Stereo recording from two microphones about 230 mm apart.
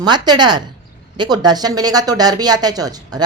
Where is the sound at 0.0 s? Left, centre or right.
Centre.